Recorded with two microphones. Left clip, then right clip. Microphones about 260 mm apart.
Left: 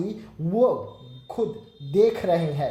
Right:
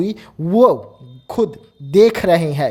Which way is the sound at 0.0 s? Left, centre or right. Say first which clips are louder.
Right 9 dB; right.